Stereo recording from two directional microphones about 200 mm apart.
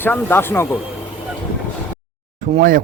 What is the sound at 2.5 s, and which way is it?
Speech, 45° right (ahead or behind).